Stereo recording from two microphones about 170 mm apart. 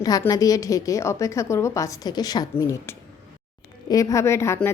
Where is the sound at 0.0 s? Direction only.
20° left (ahead or behind).